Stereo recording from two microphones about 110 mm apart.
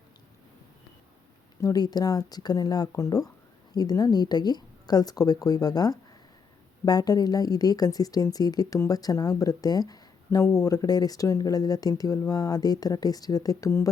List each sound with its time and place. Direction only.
1.6 s speech: 35° left (ahead or behind)